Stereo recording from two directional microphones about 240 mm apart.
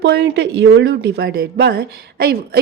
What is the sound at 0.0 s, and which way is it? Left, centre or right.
Speech, right.